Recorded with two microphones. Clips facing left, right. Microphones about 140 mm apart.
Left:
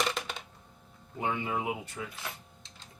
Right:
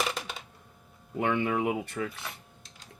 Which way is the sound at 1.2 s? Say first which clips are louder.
Right 5 dB; 65° right (ahead or behind).